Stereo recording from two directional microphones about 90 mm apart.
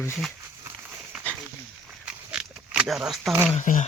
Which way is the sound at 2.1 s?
10° right (ahead or behind).